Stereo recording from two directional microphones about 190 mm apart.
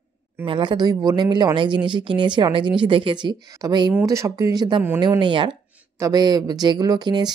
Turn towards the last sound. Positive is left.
turn(degrees=-20)  # may be behind; listen again after turning